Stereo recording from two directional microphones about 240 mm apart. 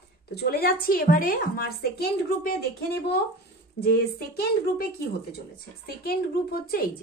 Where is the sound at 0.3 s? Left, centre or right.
Left.